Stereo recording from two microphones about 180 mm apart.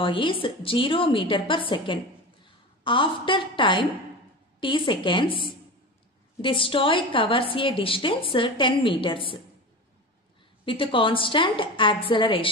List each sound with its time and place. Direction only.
0.0 s a woman's voice: 30° left (ahead or behind)
10.6 s a woman's voice: 30° left (ahead or behind)